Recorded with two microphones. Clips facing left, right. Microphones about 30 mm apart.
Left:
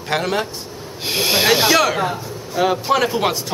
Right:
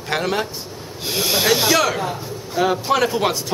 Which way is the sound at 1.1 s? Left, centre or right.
Centre.